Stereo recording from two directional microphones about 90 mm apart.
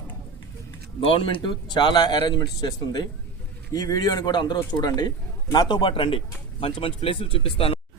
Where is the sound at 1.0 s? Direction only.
85° left.